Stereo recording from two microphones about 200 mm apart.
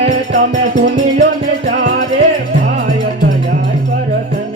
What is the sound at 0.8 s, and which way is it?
Music, 55° right (ahead or behind).